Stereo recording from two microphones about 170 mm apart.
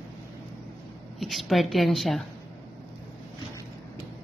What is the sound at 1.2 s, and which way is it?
Speech, centre (ahead or behind).